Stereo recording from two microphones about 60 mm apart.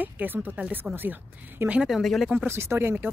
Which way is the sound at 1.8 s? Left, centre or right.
Centre.